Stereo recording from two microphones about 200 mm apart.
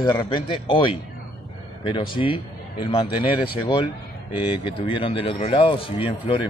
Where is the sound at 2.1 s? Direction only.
25° left (ahead or behind).